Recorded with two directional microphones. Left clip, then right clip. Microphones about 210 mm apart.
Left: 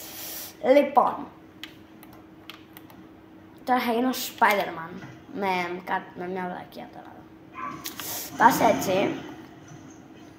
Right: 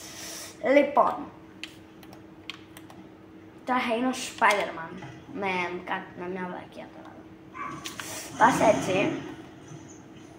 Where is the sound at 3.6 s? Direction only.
40° left (ahead or behind).